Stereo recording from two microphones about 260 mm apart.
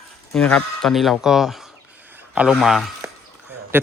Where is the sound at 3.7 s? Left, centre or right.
Centre.